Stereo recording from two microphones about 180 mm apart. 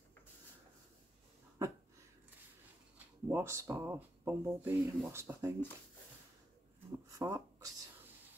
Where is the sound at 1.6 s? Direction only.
15° right (ahead or behind).